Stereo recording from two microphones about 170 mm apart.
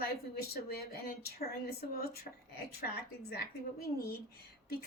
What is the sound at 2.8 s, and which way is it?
A woman's voice, 70° left (ahead or behind).